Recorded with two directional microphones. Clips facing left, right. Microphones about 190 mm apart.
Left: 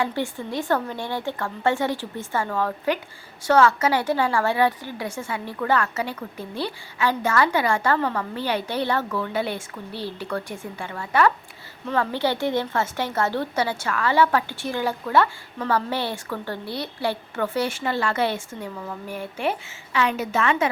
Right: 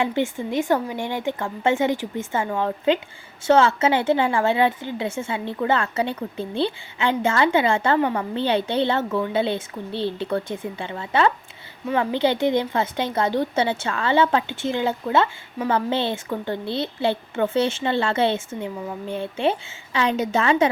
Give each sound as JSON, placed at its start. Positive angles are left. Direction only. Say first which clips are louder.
{"t": 0.0, "sound": "a woman's voice", "louder": "right 3 dB", "side_deg": -20}